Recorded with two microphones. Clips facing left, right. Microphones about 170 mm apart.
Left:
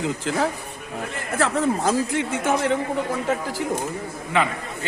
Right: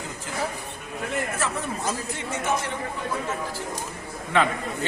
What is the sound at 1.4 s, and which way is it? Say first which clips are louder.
Speech: left 8 dB; 90° left.